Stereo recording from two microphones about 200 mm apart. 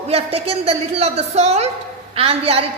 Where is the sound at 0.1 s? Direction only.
30° right (ahead or behind).